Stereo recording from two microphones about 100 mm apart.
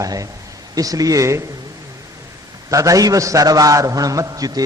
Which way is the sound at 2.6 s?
35° right (ahead or behind).